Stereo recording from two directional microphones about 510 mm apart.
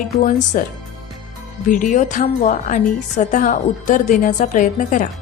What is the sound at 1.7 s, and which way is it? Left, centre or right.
A woman's voice, centre.